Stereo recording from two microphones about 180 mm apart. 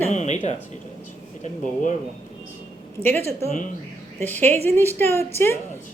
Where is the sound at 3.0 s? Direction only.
10° left (ahead or behind).